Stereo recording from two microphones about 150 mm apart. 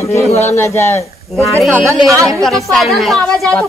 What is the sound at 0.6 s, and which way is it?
Speech, 15° left (ahead or behind).